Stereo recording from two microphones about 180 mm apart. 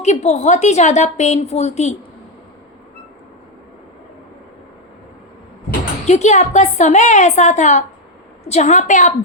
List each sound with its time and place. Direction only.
0.0 s a woman's voice: 40° left (ahead or behind)
6.1 s a woman's voice: 40° left (ahead or behind)